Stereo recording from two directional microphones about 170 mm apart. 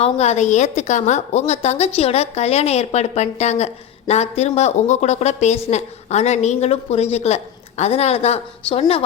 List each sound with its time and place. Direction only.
0.0 s a woman's voice: 40° left (ahead or behind)